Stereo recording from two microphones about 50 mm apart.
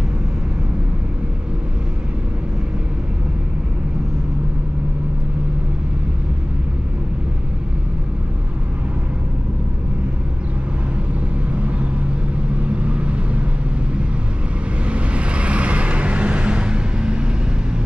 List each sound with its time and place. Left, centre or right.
11.5 s vehicle: right
14.9 s vehicle: right